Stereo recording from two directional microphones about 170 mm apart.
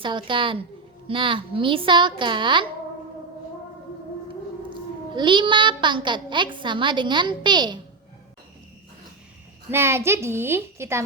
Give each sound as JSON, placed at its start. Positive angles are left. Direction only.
{"t": 0.0, "sound": "a child's voice", "side_deg": -30}
{"t": 4.7, "sound": "a child's voice", "side_deg": -30}
{"t": 9.6, "sound": "a woman's voice", "side_deg": -15}